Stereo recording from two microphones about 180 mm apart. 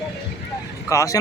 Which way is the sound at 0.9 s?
15° left (ahead or behind).